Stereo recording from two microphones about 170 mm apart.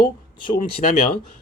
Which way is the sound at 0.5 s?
60° left (ahead or behind).